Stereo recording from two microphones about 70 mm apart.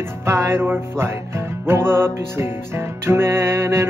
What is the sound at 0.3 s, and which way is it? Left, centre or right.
Music, right.